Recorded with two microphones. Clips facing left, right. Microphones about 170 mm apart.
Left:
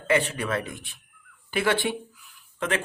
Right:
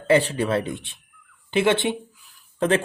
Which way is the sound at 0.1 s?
30° right (ahead or behind).